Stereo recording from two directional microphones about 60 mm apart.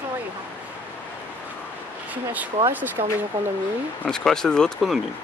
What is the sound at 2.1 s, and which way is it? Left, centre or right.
Speech, right.